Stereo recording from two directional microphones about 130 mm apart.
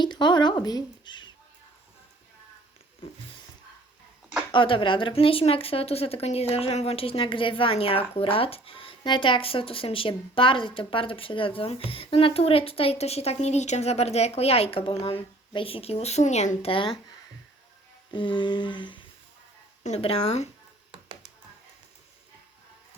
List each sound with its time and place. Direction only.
0.0 s speech: 35° left (ahead or behind)
4.5 s speech: 40° left (ahead or behind); by 16.7 s 60° left (ahead or behind)
16.7 s humming: 40° left (ahead or behind)
18.1 s humming: 35° left (ahead or behind)
19.8 s speech: 55° left (ahead or behind)